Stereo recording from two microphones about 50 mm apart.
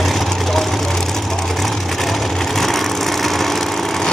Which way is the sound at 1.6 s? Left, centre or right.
Centre.